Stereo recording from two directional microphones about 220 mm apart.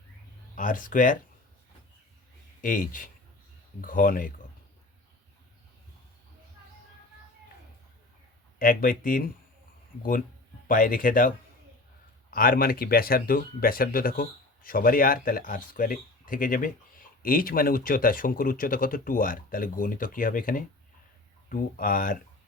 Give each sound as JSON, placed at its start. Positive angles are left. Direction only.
{"t": 0.5, "sound": "speech", "side_deg": 35}
{"t": 2.6, "sound": "speech", "side_deg": 40}
{"t": 8.5, "sound": "speech", "side_deg": 40}
{"t": 10.7, "sound": "speech", "side_deg": 40}